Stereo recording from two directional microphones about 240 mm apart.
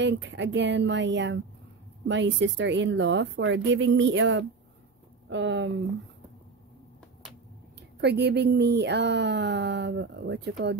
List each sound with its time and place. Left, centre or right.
0.0 s speech: right
8.0 s speech: right